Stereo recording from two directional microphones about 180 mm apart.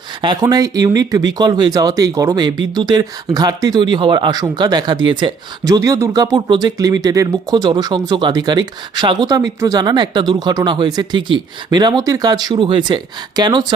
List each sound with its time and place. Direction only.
0.2 s speech: 20° right (ahead or behind)